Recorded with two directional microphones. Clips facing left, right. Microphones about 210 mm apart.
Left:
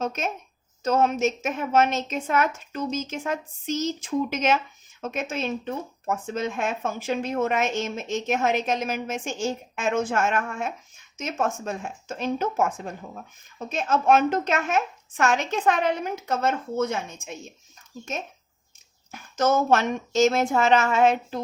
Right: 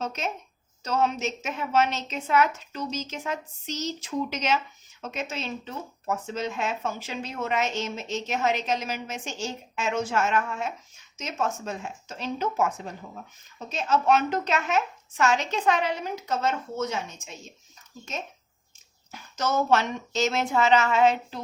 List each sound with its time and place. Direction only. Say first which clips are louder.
0.0 s a woman's voice: left 3 dB; 50° left (ahead or behind)
19.1 s a woman's voice: left 5 dB; 50° left (ahead or behind)